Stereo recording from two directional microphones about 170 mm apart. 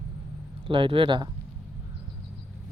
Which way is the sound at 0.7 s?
30° right (ahead or behind).